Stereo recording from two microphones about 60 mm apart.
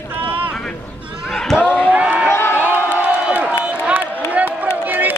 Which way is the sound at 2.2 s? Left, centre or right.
Left.